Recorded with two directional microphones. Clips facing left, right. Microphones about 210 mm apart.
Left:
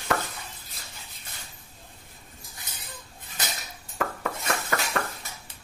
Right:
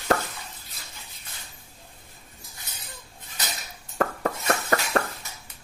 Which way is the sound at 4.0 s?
35° right (ahead or behind).